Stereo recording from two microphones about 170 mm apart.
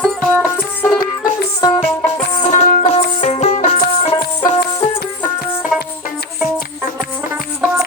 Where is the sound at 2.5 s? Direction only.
45° left (ahead or behind).